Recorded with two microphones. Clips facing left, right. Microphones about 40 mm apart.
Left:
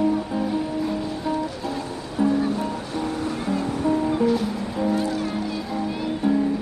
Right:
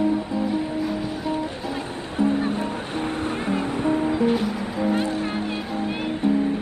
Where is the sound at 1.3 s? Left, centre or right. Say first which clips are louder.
Left 2 dB; right.